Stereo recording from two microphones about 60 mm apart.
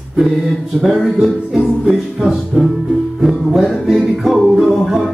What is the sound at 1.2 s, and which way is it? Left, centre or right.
Music, centre.